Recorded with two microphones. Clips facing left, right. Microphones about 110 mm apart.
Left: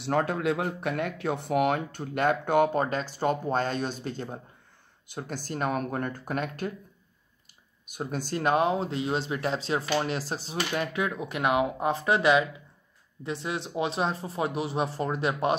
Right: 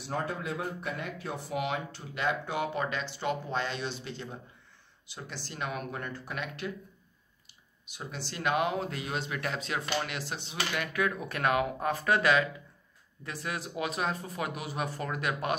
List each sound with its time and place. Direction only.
0.0 s speech: 70° left (ahead or behind); by 6.7 s 45° left (ahead or behind)
7.8 s speech: 50° left (ahead or behind); by 15.5 s 30° left (ahead or behind)